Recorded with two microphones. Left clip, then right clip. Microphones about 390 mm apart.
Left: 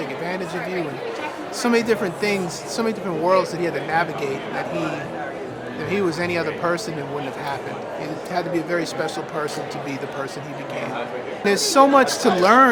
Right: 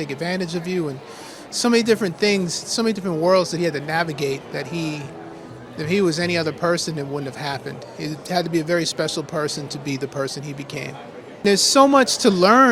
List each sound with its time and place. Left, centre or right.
0.2 s speech: right
1.5 s speech: right
8.0 s speech: right
11.4 s speech: right